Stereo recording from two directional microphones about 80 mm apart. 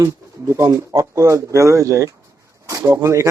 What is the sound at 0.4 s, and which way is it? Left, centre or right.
Speech, right.